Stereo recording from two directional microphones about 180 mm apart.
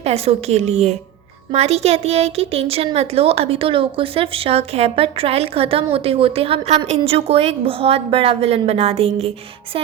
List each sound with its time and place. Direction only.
0.0 s speech: 35° right (ahead or behind)